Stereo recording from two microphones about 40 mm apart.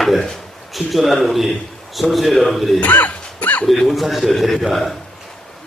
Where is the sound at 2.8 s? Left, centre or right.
Left.